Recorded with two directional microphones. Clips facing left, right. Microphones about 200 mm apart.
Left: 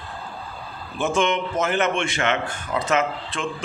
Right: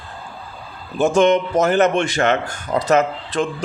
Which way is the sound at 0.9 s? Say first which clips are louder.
Right 7 dB; 40° right (ahead or behind).